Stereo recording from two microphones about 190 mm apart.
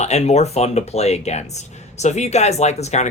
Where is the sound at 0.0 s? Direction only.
35° left (ahead or behind).